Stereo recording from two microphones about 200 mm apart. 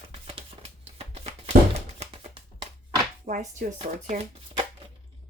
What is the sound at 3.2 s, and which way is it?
Speech, 40° right (ahead or behind).